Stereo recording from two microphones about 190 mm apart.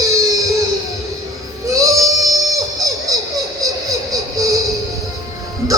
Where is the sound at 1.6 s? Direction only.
15° right (ahead or behind).